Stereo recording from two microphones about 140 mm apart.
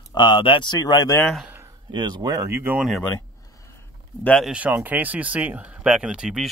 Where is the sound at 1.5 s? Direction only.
20° right (ahead or behind).